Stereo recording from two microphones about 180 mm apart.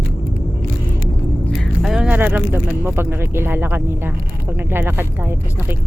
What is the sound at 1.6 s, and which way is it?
Speech, centre (ahead or behind).